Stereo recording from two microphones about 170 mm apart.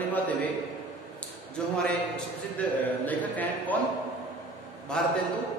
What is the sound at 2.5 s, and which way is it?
A woman's voice, 10° left (ahead or behind).